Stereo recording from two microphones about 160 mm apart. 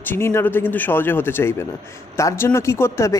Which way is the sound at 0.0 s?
15° left (ahead or behind).